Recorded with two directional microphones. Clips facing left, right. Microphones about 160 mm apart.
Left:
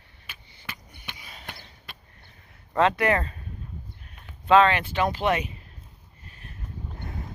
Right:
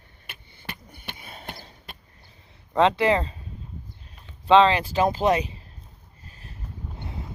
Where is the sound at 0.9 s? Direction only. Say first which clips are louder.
Right 3 dB; 55° right (ahead or behind).